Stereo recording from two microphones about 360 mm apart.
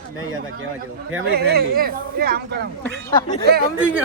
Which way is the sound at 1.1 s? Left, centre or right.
Right.